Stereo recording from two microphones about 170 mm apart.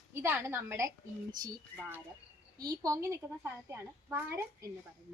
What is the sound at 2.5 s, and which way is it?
A woman's voice, 20° right (ahead or behind).